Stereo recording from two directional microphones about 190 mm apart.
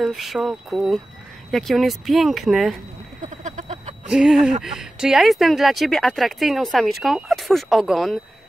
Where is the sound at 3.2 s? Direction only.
40° right (ahead or behind).